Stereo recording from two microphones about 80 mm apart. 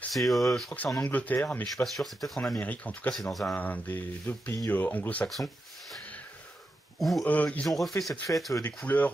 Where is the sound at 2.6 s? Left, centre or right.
Centre.